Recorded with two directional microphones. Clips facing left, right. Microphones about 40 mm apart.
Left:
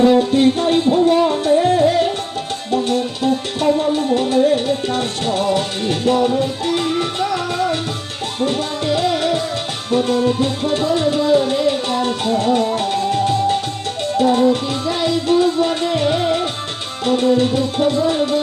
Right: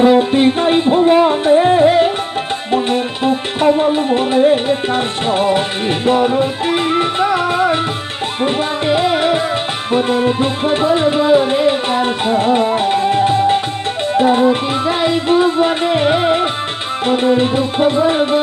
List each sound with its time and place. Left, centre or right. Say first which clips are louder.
0.0 s music: right 2 dB; right
0.9 s music: right 4 dB; right
4.1 s music: right 2 dB; right